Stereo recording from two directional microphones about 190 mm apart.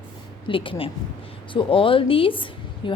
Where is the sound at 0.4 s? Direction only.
25° left (ahead or behind).